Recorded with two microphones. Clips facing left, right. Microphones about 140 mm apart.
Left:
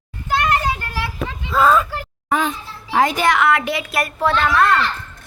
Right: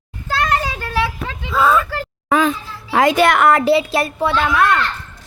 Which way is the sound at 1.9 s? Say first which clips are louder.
Right 3 dB; 90° right.